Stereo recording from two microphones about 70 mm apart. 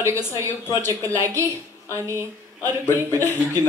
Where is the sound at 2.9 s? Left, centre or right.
Right.